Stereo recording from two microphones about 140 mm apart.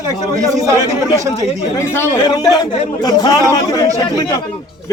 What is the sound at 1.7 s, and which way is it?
A man's voice, 20° left (ahead or behind).